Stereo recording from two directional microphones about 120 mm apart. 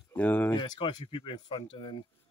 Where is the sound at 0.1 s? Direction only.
15° left (ahead or behind).